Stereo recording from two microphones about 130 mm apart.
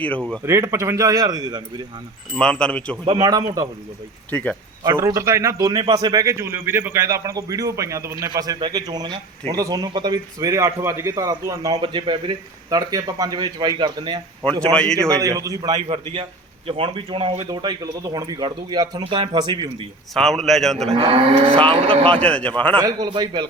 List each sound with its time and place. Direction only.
0.4 s a man's voice: 20° right (ahead or behind)
2.4 s a man's voice: 5° left (ahead or behind)
3.1 s a man's voice: 30° right (ahead or behind)
4.3 s a man's voice: 10° left (ahead or behind)
4.9 s a man's voice: 25° right (ahead or behind)
11.8 s speech: 35° right (ahead or behind)
12.7 s speech: 30° right (ahead or behind)
14.6 s a man's voice: 5° left (ahead or behind)
15.2 s a man's voice: 25° right (ahead or behind)
16.6 s speech: 45° right (ahead or behind)
20.1 s a man's voice: centre (ahead or behind)
20.9 s moo: 40° right (ahead or behind)
22.1 s a man's voice: 10° left (ahead or behind)
22.8 s speech: 30° right (ahead or behind)